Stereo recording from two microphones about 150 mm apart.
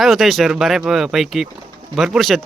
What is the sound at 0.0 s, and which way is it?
Speech, centre (ahead or behind).